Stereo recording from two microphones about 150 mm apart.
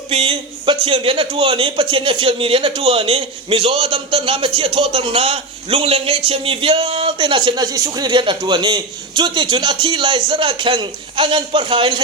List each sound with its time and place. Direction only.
0.1 s a man's voice: 40° right (ahead or behind)